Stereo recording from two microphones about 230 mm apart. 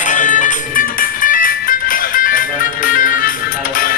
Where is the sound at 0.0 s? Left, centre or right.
Left.